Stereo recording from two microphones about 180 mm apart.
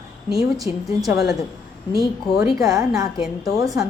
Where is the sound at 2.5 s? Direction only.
20° right (ahead or behind).